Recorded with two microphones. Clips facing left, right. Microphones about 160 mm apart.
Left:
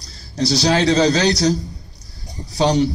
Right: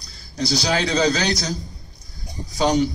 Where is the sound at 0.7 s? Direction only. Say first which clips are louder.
Left 5 dB; 35° left (ahead or behind).